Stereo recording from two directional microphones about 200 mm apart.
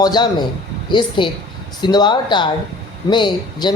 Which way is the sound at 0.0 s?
20° left (ahead or behind).